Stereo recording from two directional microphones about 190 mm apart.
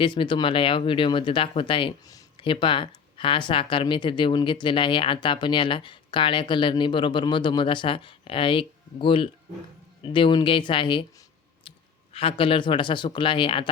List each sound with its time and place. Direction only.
0.0 s speech: 25° left (ahead or behind)
12.1 s speech: 30° left (ahead or behind)